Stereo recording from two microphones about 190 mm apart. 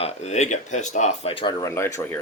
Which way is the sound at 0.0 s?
35° left (ahead or behind).